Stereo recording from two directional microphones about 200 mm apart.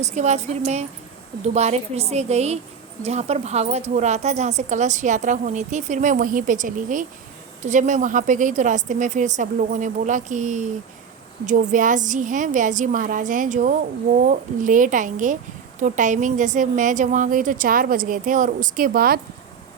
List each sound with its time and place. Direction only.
0.0 s a woman's voice: 35° right (ahead or behind)
11.7 s a woman's voice: 40° right (ahead or behind)